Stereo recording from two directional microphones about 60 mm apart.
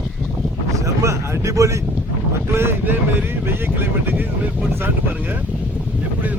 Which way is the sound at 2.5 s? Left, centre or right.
Right.